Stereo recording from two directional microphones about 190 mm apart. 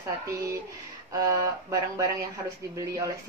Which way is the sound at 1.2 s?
15° right (ahead or behind).